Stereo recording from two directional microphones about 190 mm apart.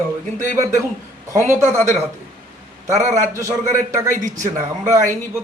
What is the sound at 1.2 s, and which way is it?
Speech, 15° right (ahead or behind).